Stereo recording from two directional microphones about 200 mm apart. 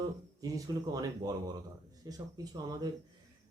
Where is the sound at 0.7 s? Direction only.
20° right (ahead or behind).